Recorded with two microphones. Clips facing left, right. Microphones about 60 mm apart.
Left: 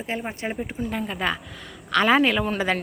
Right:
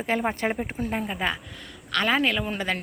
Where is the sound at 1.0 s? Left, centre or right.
Centre.